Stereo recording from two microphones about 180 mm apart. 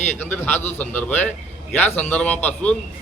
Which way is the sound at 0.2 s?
10° left (ahead or behind).